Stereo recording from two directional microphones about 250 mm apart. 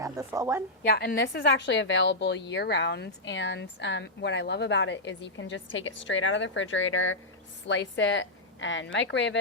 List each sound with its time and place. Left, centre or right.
0.0 s a woman's voice: centre
0.9 s a woman's voice: left